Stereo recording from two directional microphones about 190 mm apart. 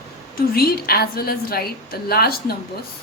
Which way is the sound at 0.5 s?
55° left (ahead or behind).